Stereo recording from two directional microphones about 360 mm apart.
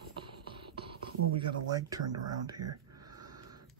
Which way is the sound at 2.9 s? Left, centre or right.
Centre.